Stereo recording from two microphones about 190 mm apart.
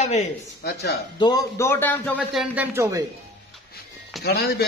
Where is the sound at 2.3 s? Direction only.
Centre (ahead or behind).